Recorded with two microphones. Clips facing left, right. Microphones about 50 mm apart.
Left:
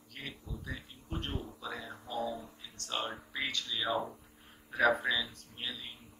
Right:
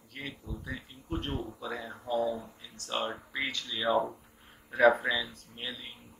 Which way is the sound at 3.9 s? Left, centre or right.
Right.